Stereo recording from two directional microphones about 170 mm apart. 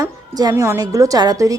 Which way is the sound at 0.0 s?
20° right (ahead or behind).